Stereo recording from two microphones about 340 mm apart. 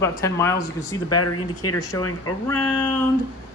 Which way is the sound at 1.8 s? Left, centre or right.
Centre.